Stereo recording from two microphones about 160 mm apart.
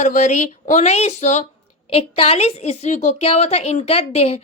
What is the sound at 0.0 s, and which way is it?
A woman's voice, 50° left (ahead or behind).